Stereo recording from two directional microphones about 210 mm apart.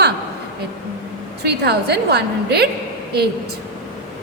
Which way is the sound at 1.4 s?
50° right (ahead or behind).